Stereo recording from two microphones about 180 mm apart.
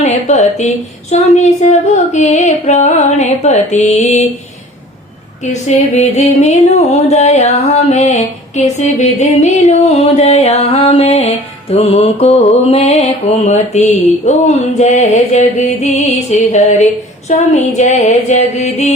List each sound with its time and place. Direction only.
0.0 s mantra: 40° left (ahead or behind)
5.4 s mantra: 40° left (ahead or behind)